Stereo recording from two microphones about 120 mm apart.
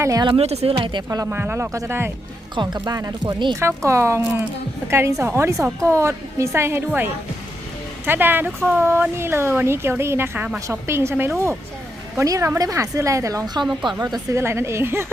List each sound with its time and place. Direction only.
0.0 s speech: 30° right (ahead or behind)
0.3 s speech: 55° right (ahead or behind)
0.8 s speech: 40° right (ahead or behind)
1.2 s speech: 20° right (ahead or behind)
2.6 s speech: 35° right (ahead or behind)